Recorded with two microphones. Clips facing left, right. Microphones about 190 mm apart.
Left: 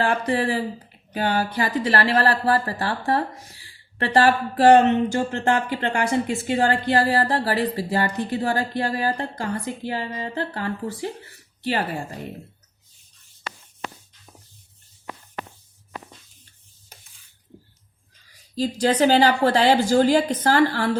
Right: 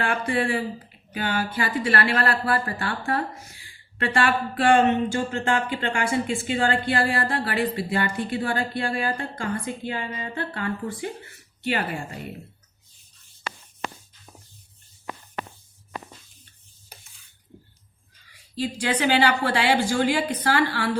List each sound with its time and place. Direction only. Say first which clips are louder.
0.0 s speech: left 3 dB; 35° left (ahead or behind)
18.5 s speech: left 5 dB; 40° left (ahead or behind)